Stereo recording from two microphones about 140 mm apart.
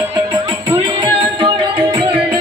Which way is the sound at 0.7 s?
35° right (ahead or behind).